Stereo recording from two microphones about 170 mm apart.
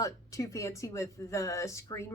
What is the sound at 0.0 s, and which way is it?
Speech, 20° left (ahead or behind).